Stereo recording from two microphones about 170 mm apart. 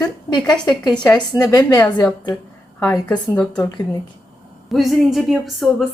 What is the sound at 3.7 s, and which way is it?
Speech, 25° left (ahead or behind).